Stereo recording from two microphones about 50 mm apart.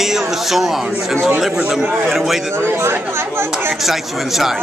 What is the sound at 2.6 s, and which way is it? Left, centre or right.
Speech, right.